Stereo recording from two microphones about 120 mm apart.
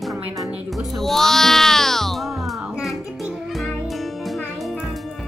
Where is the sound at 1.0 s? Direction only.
Centre (ahead or behind).